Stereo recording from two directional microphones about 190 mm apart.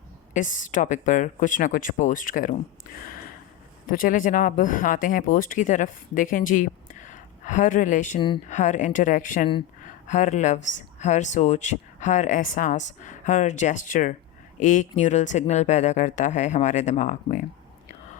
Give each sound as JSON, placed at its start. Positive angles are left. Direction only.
{"t": 0.3, "sound": "speech", "side_deg": 45}
{"t": 3.0, "sound": "a sound", "side_deg": 50}
{"t": 3.8, "sound": "speech", "side_deg": 45}